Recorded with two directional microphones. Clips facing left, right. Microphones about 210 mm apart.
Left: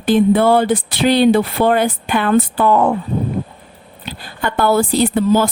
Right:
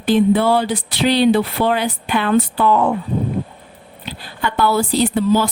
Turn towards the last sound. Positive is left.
turn(degrees=50)  # may be behind; listen again after turning